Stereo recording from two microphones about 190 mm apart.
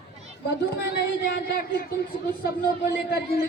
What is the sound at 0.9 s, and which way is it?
Speech, 60° left (ahead or behind).